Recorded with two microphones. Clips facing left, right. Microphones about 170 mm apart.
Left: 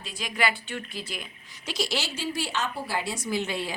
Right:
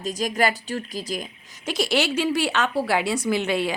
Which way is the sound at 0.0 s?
45° right (ahead or behind).